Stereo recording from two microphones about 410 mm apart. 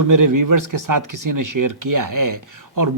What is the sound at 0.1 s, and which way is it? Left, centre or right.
Speech, right.